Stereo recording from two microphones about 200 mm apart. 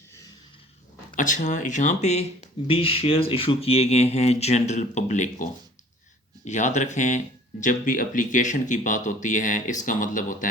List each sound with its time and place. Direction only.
1.1 s speech: 40° left (ahead or behind)